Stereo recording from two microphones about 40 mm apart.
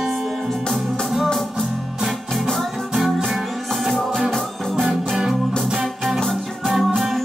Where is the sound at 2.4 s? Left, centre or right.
Centre.